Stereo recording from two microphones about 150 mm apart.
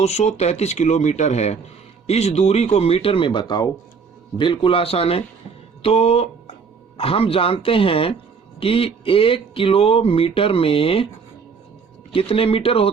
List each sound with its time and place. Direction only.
0.0 s speech: 45° left (ahead or behind)
12.1 s speech: 40° left (ahead or behind)